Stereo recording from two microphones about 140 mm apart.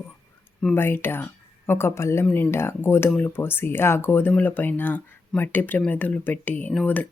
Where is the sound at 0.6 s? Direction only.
15° left (ahead or behind).